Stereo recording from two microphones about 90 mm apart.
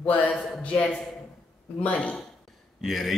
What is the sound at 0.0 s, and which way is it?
Speech, 20° left (ahead or behind).